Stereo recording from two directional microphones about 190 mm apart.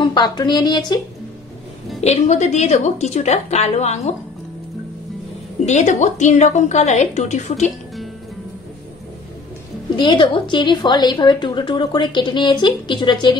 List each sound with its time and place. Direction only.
0.0 s a woman's voice: 25° left (ahead or behind)
2.0 s a woman's voice: 35° left (ahead or behind)
5.7 s a woman's voice: 40° left (ahead or behind)
9.9 s a woman's voice: 25° left (ahead or behind)